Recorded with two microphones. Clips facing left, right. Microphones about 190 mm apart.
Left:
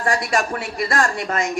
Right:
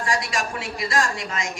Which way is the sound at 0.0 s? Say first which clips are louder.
Left 5 dB; 55° left (ahead or behind).